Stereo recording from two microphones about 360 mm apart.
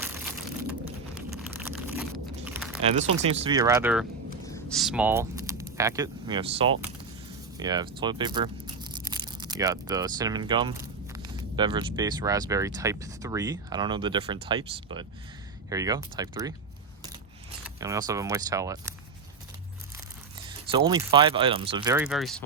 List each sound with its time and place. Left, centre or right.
1.1 s a sound: centre
2.8 s speech: centre
4.5 s a sound: centre
5.7 s speech: centre
17.7 s speech: centre
20.7 s speech: centre